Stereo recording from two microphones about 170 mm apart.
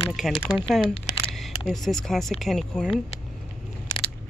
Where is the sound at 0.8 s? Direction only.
35° left (ahead or behind).